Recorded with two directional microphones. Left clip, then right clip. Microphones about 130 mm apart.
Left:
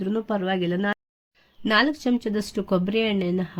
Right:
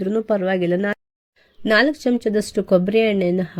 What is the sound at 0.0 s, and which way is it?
Speech, 30° right (ahead or behind).